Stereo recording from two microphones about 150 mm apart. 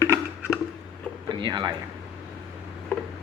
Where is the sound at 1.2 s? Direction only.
25° right (ahead or behind).